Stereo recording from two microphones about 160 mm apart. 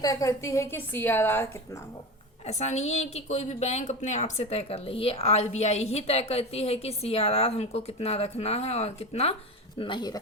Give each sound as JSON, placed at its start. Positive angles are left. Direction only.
{"t": 0.0, "sound": "a woman's voice", "side_deg": 20}
{"t": 2.5, "sound": "a woman's voice", "side_deg": 45}